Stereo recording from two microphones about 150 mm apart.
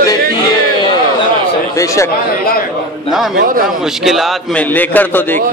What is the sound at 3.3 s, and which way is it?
Speech, 70° right (ahead or behind).